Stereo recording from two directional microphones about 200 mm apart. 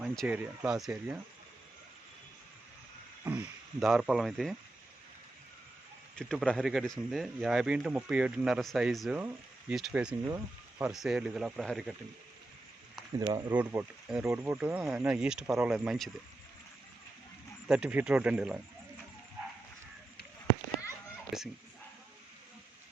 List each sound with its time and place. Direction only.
0.0 s speech: 5° right (ahead or behind)
3.2 s speech: 5° right (ahead or behind)
6.1 s speech: 5° left (ahead or behind)
13.1 s speech: 20° right (ahead or behind)
13.5 s speech: 5° right (ahead or behind)
17.7 s speech: 5° right (ahead or behind)
21.3 s speech: centre (ahead or behind)